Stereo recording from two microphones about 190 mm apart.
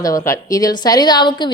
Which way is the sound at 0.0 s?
20° left (ahead or behind).